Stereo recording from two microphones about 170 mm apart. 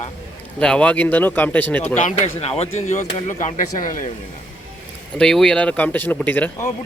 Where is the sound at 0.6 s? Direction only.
5° left (ahead or behind).